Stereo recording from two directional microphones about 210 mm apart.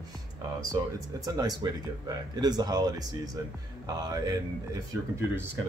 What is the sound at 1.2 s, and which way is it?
Speech, 20° right (ahead or behind).